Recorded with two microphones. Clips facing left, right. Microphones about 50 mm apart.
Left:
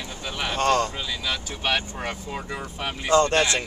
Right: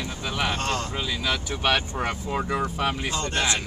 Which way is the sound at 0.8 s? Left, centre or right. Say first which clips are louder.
Right 1 dB; centre.